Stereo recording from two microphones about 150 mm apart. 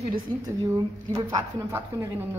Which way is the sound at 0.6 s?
20° right (ahead or behind).